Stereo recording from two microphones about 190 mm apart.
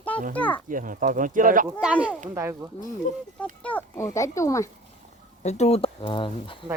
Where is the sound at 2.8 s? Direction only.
45° left (ahead or behind).